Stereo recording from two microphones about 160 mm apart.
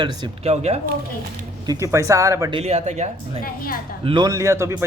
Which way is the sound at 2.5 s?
40° right (ahead or behind).